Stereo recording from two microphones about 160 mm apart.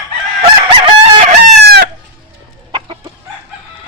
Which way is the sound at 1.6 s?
85° right.